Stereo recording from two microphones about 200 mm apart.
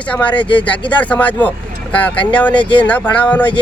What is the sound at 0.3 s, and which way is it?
Speech, 25° left (ahead or behind).